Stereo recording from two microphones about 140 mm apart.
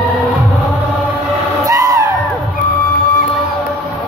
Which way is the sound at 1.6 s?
25° right (ahead or behind).